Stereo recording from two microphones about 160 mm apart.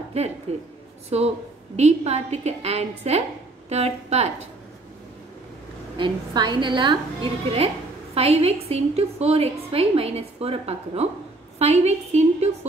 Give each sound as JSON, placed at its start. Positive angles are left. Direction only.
{"t": 0.1, "sound": "a woman's voice", "side_deg": -40}
{"t": 5.9, "sound": "a woman's voice", "side_deg": -30}